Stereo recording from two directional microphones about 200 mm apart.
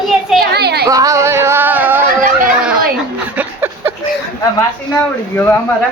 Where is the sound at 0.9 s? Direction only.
15° right (ahead or behind).